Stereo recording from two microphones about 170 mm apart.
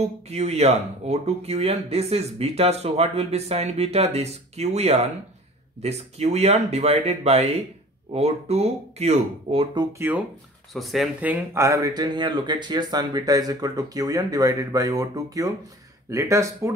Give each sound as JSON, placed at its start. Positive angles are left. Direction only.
{"t": 0.0, "sound": "speech", "side_deg": -40}
{"t": 9.9, "sound": "speech", "side_deg": -10}
{"t": 10.7, "sound": "speech", "side_deg": 0}